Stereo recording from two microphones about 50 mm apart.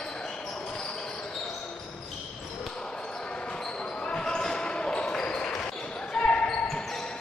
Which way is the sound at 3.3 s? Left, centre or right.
Centre.